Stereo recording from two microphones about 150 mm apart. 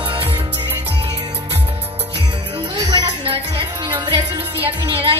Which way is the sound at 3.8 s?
30° right (ahead or behind).